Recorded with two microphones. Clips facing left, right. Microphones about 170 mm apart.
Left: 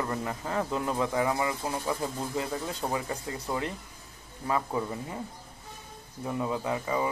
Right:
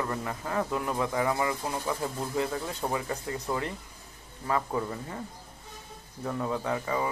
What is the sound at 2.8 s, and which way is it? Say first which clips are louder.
Speech: right 2 dB; 5° left (ahead or behind).